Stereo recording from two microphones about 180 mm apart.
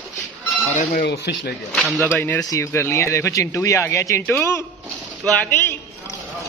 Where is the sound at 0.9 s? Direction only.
60° left (ahead or behind).